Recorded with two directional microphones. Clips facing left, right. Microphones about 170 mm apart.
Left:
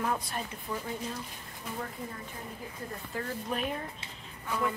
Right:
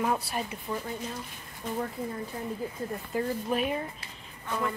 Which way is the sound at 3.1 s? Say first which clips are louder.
Right 7 dB; 15° right (ahead or behind).